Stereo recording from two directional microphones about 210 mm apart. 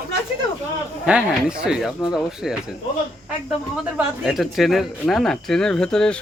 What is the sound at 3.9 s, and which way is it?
Speech, centre (ahead or behind).